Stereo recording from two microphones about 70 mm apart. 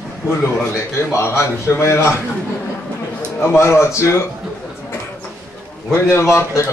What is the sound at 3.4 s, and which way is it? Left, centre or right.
Speech, left.